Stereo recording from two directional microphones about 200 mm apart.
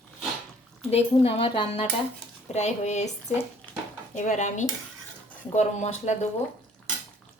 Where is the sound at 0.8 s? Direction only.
30° left (ahead or behind).